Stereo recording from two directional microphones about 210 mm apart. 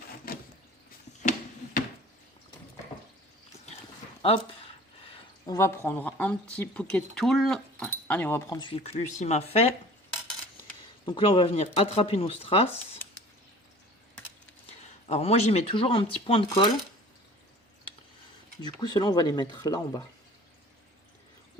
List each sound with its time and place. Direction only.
4.2 s speech: 25° left (ahead or behind)
11.0 s speech: 25° left (ahead or behind)
14.7 s speech: 30° left (ahead or behind)
18.6 s speech: 20° left (ahead or behind)